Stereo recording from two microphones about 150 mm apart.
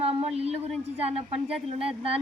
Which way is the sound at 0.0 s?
40° right (ahead or behind).